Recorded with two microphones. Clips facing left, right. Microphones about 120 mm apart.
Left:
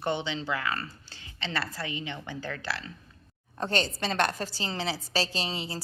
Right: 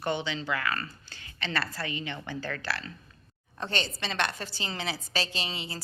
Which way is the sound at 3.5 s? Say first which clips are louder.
Left 4 dB; 40° left (ahead or behind).